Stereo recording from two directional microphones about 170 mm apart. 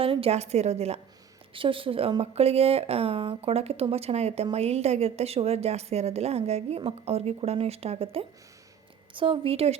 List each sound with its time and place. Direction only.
0.0 s a woman's voice: 35° right (ahead or behind)